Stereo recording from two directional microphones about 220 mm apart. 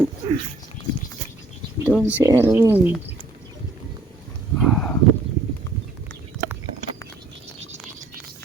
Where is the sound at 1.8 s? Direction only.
5° right (ahead or behind).